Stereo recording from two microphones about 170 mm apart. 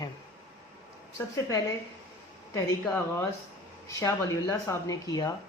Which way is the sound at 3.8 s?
20° left (ahead or behind).